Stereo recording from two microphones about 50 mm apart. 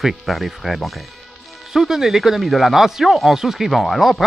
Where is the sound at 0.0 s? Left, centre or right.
Centre.